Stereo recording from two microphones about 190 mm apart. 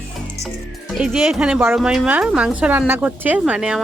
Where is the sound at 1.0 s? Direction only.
Centre (ahead or behind).